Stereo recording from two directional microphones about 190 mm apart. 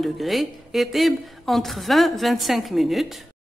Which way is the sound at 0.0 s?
Centre (ahead or behind).